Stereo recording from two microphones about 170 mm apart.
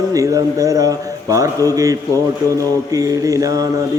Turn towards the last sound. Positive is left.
turn(degrees=-20)  # may be behind; listen again after turning